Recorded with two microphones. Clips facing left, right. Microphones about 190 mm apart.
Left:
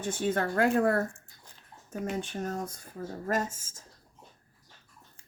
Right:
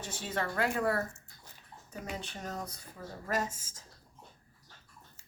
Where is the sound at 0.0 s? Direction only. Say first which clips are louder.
Left 7 dB; 50° left (ahead or behind).